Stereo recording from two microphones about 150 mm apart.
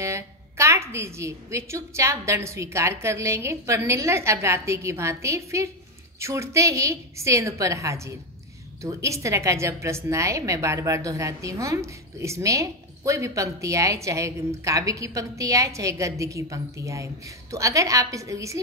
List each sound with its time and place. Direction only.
0.0 s a woman's voice: 20° right (ahead or behind)